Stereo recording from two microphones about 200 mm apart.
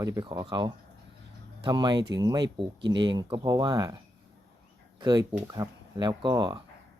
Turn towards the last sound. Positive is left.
turn(degrees=-20)  # may be behind; listen again after turning